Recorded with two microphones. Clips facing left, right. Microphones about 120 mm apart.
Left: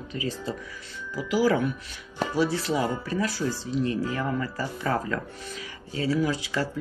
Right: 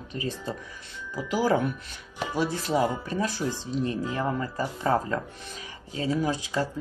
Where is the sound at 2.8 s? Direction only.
20° right (ahead or behind).